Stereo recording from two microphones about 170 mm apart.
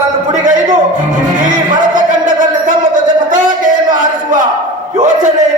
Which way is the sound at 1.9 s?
50° right (ahead or behind).